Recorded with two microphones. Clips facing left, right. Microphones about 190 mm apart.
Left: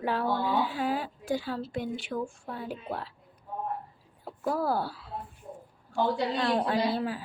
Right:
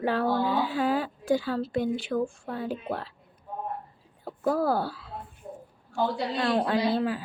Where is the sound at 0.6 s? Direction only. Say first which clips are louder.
Right 4 dB; 90° right.